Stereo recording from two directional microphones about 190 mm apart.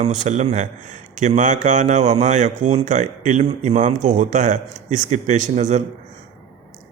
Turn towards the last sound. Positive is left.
turn(degrees=-40)  # may be behind; listen again after turning